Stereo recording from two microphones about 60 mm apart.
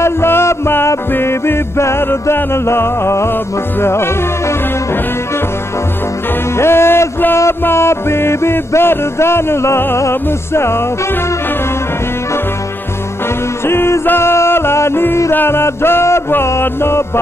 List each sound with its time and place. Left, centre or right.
0.0 s music: left
6.5 s music: left
13.7 s music: left